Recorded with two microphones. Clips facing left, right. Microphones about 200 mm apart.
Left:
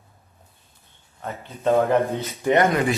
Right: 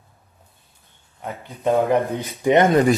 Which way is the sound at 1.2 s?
15° right (ahead or behind).